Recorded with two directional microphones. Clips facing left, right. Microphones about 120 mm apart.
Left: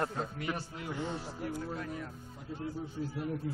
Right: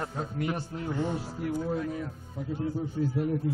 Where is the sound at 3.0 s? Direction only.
65° right (ahead or behind).